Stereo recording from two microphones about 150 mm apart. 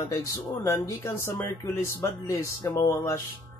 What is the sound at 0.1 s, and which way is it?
Speech, 20° left (ahead or behind).